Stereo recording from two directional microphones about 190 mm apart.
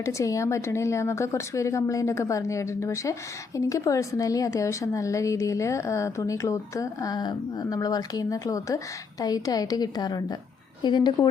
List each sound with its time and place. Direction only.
0.0 s a woman's voice: 15° left (ahead or behind)